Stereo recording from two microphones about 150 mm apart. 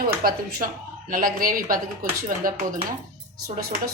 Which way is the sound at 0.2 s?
70° right (ahead or behind).